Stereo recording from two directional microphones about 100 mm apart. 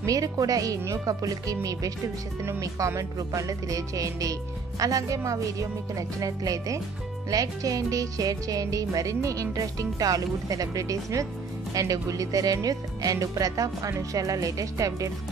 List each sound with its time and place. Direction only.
0.0 s music: 35° right (ahead or behind)